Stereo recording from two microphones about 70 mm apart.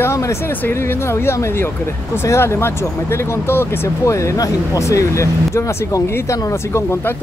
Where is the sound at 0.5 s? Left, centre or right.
Left.